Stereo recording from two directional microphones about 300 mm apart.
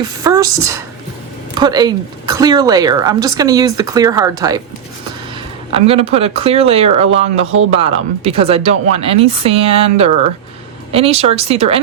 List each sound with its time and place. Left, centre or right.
0.2 s a woman's voice: centre
5.8 s speech: centre